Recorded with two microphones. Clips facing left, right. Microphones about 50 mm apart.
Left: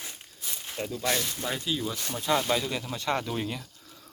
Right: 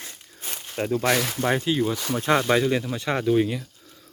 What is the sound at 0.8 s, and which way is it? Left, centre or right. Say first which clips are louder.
Speech: right 8 dB; right.